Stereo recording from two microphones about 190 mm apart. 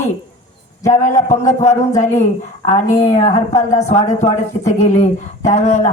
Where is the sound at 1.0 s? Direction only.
40° left (ahead or behind).